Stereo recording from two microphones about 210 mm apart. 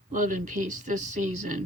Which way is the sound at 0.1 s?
40° right (ahead or behind).